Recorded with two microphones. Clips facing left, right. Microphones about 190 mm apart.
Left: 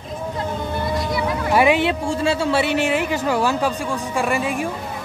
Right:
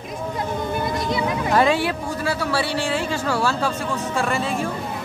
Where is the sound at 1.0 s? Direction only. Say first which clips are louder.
Even; 20° right (ahead or behind).